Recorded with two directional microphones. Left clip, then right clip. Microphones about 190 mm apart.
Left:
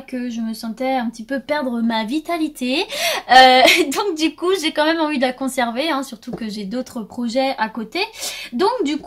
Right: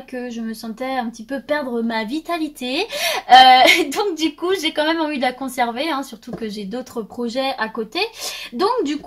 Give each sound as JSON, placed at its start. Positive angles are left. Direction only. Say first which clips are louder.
{"t": 0.3, "sound": "speech", "louder": "left 2 dB", "side_deg": 30}